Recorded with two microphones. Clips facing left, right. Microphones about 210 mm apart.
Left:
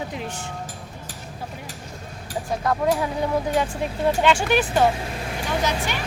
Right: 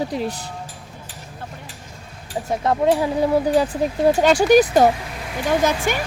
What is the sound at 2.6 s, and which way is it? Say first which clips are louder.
A woman's voice: right 4 dB; 30° right (ahead or behind).